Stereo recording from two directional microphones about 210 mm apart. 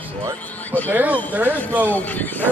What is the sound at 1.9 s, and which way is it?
Speech, 10° left (ahead or behind).